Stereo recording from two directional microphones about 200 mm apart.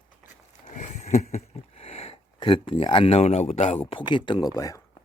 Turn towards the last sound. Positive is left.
turn(degrees=20)  # may be behind; listen again after turning